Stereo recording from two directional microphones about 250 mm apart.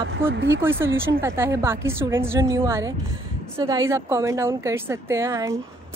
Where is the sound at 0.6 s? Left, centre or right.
Centre.